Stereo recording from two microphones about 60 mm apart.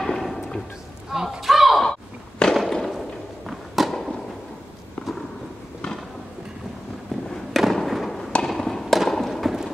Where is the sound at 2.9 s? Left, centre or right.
Centre.